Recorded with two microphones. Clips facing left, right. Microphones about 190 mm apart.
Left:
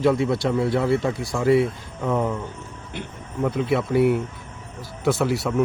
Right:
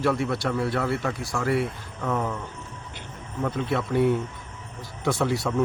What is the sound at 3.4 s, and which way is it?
A man's voice, 10° left (ahead or behind).